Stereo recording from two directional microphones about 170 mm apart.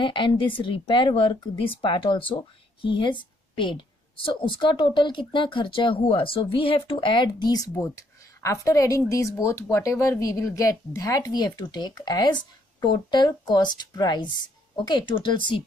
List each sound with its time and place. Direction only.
0.0 s a woman's voice: 30° left (ahead or behind)